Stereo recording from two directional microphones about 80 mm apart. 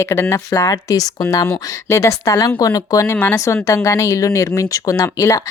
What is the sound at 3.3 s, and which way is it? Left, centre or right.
Speech, left.